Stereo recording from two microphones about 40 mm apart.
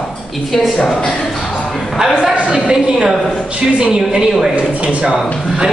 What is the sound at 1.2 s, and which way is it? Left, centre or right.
Music, centre.